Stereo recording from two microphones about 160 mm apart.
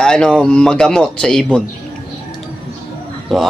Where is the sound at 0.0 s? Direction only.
5° left (ahead or behind).